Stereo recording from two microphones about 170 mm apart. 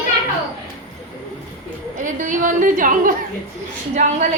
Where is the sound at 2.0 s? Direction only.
50° right (ahead or behind).